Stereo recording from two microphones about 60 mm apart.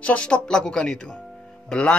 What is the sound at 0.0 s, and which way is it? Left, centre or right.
Speech, centre.